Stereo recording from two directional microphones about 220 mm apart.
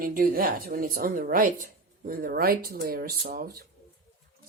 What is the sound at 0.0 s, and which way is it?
A woman's voice, 40° right (ahead or behind).